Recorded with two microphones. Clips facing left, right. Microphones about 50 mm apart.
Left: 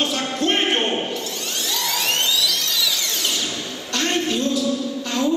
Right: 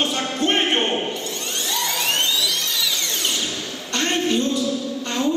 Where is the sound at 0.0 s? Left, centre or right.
Centre.